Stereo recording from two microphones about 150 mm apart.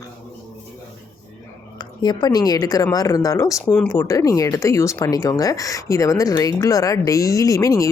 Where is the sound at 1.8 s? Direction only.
30° left (ahead or behind).